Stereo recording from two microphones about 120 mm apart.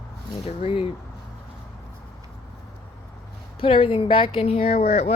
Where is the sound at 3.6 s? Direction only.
50° left (ahead or behind).